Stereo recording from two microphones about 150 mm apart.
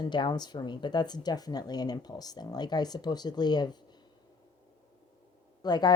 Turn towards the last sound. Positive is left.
turn(degrees=30)  # may be behind; listen again after turning